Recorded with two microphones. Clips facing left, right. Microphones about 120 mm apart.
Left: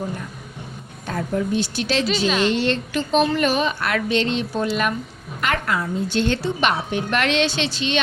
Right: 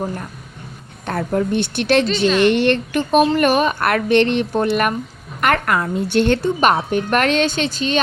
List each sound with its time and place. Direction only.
1.0 s a woman's voice: 60° right (ahead or behind)
2.0 s a woman's voice: 5° left (ahead or behind)
2.4 s a woman's voice: 60° right (ahead or behind); by 7.9 s 45° right (ahead or behind)